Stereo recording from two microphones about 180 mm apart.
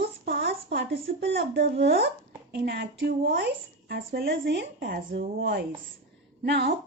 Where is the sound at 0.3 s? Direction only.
60° right (ahead or behind).